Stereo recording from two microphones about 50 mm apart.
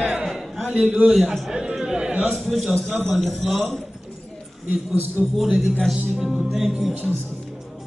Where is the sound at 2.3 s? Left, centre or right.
Centre.